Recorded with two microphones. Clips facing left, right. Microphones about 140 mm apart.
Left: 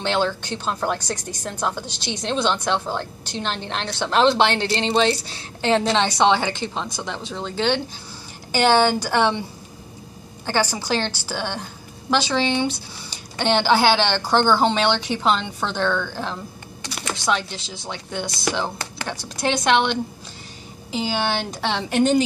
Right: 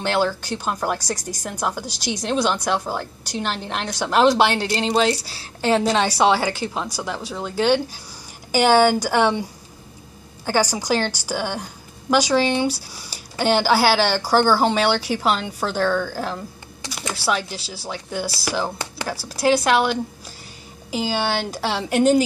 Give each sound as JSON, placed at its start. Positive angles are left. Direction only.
{"t": 0.0, "sound": "a woman's voice", "side_deg": -10}